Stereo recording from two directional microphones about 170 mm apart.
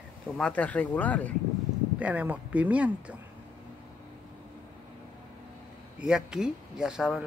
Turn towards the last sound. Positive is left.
turn(degrees=-5)  # may be behind; listen again after turning